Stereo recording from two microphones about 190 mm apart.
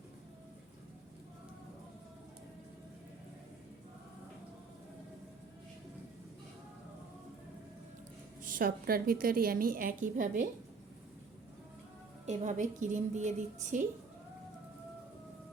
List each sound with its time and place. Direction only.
8.4 s a woman's voice: 50° right (ahead or behind)
12.2 s a woman's voice: 35° right (ahead or behind)